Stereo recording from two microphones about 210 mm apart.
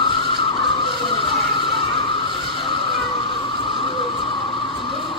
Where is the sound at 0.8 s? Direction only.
25° left (ahead or behind).